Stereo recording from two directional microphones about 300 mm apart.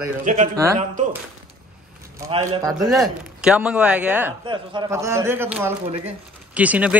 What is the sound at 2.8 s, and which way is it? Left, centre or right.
Speech, centre.